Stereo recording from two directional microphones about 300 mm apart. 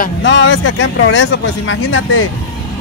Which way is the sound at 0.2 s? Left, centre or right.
Left.